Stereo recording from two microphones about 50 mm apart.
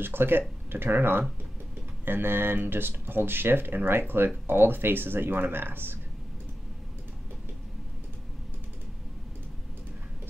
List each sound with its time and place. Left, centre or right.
0.0 s speech: right